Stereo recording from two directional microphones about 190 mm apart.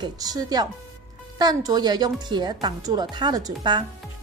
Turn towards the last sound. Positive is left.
turn(degrees=-20)  # may be behind; listen again after turning